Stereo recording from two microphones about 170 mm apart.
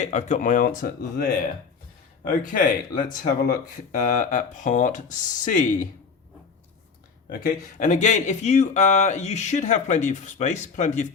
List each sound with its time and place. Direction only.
0.0 s speech: 45° left (ahead or behind)
7.8 s speech: 45° left (ahead or behind)